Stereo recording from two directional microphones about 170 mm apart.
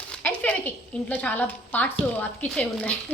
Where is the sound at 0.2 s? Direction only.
10° left (ahead or behind).